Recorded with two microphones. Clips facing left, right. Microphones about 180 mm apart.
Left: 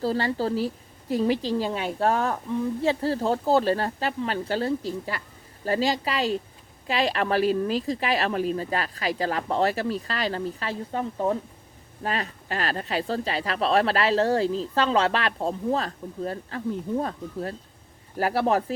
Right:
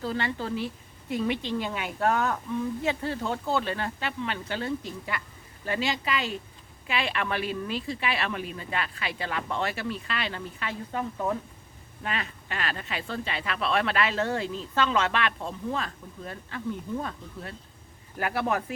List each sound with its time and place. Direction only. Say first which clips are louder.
0.0 s speech: left 6 dB; 35° left (ahead or behind)